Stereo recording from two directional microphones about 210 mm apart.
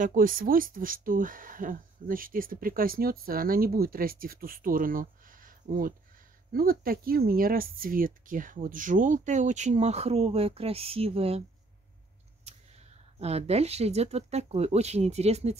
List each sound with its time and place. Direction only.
0.0 s speech: 40° right (ahead or behind)
12.4 s speech: 30° right (ahead or behind)